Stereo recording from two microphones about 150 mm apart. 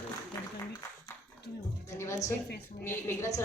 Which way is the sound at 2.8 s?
15° left (ahead or behind).